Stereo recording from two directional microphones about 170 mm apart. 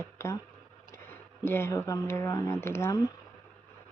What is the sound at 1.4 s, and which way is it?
Speech, 15° left (ahead or behind).